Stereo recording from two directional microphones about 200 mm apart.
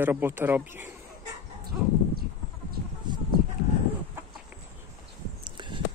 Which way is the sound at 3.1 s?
20° right (ahead or behind).